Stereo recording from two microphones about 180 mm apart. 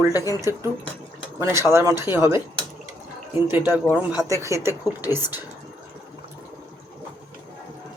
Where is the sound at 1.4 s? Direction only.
15° right (ahead or behind).